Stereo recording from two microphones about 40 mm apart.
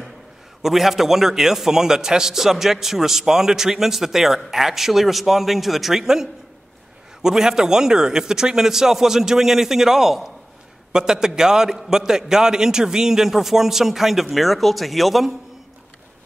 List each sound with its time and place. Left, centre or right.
0.6 s a man's voice: centre